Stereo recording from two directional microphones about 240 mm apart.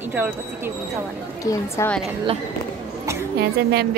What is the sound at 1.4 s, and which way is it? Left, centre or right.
Speech, centre.